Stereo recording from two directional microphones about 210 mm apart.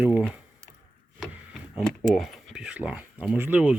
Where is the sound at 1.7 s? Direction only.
Centre (ahead or behind).